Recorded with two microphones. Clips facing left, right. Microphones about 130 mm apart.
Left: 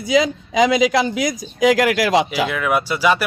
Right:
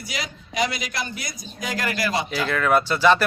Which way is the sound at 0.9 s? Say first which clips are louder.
Left 13 dB; 90° left.